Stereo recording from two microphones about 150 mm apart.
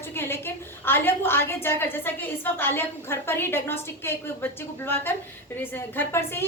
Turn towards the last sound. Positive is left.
turn(degrees=15)  # may be behind; listen again after turning